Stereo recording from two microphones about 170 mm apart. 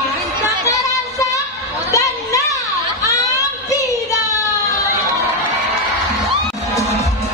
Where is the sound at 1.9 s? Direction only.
20° left (ahead or behind).